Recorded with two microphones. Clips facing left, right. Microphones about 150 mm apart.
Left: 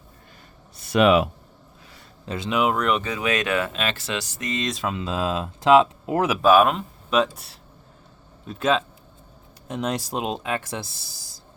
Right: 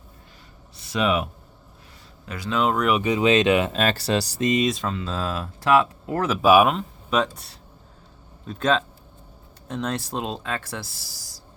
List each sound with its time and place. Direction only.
0.8 s speech: 60° left (ahead or behind); by 1.3 s 85° left
2.2 s speech: 25° left (ahead or behind)
2.5 s speech: 10° left (ahead or behind)
2.7 s speech: 5° right (ahead or behind)
3.0 s speech: 20° right (ahead or behind)
3.7 s speech: 40° right (ahead or behind)
4.6 s speech: centre (ahead or behind)
4.9 s speech: 15° left (ahead or behind)
6.4 s speech: 10° right (ahead or behind)
6.7 s speech: centre (ahead or behind); by 11.3 s 20° left (ahead or behind)